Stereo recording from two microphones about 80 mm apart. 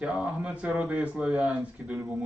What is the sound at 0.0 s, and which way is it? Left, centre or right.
Speech, centre.